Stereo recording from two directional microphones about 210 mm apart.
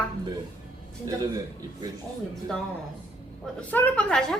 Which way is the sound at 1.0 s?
15° right (ahead or behind).